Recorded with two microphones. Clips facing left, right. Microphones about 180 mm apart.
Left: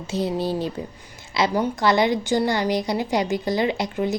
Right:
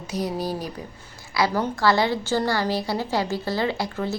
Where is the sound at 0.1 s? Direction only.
25° left (ahead or behind).